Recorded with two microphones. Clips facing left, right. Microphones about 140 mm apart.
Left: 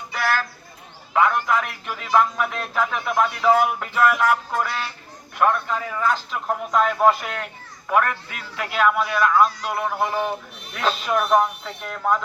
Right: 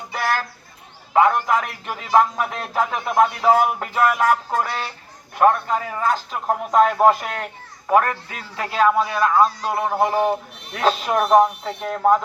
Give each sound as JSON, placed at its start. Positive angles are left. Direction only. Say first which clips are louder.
{"t": 1.1, "sound": "speech", "louder": "right 3 dB", "side_deg": -35}